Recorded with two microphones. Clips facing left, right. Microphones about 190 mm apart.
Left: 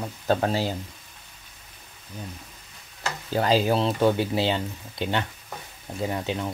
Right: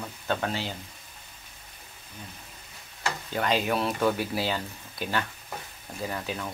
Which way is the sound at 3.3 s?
35° left (ahead or behind).